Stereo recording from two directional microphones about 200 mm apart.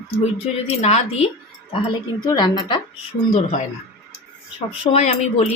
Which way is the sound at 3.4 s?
35° left (ahead or behind).